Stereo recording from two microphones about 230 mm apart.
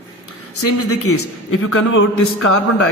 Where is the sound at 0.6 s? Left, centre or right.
Left.